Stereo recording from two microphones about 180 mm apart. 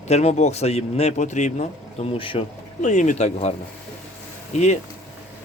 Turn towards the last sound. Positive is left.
turn(degrees=40)  # may be behind; listen again after turning